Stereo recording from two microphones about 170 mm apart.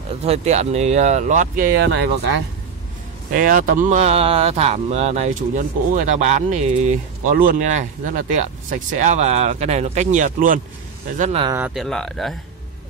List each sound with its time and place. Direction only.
0.2 s speech: 40° right (ahead or behind)
1.7 s speech: 85° right
3.3 s speech: 55° right (ahead or behind)
11.7 s speech: centre (ahead or behind)